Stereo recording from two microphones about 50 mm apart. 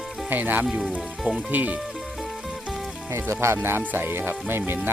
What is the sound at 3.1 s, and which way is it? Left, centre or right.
Speech, right.